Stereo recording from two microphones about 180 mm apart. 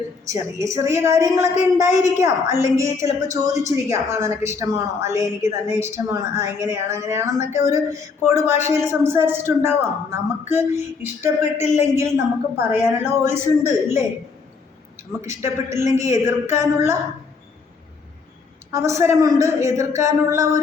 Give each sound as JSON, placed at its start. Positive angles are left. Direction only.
{"t": 0.3, "sound": "a woman's voice", "side_deg": -15}
{"t": 15.2, "sound": "a woman's voice", "side_deg": -15}
{"t": 18.7, "sound": "a woman's voice", "side_deg": -15}